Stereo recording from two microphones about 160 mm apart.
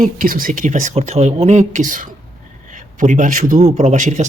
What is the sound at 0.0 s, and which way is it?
A man's voice, 60° right (ahead or behind).